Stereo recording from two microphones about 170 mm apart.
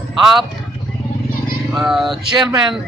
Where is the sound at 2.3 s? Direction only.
25° right (ahead or behind).